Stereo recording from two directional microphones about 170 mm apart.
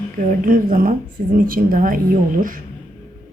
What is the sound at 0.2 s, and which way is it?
Speech, 50° right (ahead or behind).